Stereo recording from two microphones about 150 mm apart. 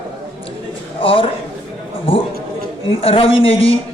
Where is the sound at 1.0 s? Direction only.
35° left (ahead or behind).